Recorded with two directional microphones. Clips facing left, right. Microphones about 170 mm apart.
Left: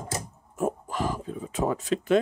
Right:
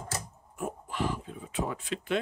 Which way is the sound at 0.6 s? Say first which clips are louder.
Left 5 dB; 40° left (ahead or behind).